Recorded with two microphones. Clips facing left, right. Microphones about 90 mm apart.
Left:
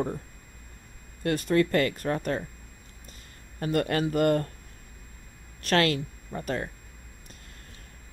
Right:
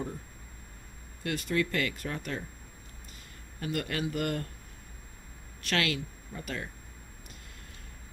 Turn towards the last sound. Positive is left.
turn(degrees=40)  # may be behind; listen again after turning